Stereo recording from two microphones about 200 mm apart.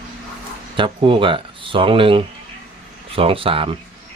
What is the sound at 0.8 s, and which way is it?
Speech, 25° right (ahead or behind).